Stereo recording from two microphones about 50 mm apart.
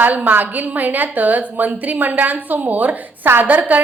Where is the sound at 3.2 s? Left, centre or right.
Right.